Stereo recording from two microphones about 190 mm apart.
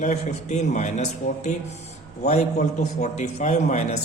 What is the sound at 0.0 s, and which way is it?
A man's voice, 40° left (ahead or behind).